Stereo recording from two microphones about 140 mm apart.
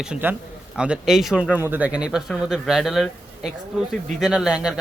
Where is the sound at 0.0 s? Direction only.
10° right (ahead or behind).